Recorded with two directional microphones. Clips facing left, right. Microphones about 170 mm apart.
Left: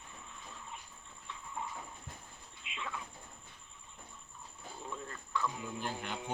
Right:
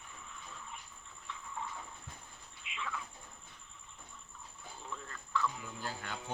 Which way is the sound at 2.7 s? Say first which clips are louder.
Right 1 dB; 25° left (ahead or behind).